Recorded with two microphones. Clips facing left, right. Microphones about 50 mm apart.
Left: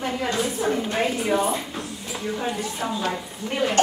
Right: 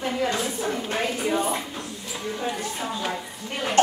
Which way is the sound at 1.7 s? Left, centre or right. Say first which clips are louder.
Left 2 dB; centre.